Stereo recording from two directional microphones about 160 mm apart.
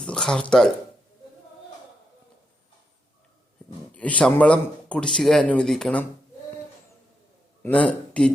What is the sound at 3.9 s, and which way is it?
Speech, 10° left (ahead or behind).